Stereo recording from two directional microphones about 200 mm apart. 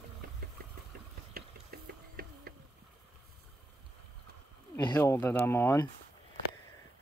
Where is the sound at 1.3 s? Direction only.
50° right (ahead or behind).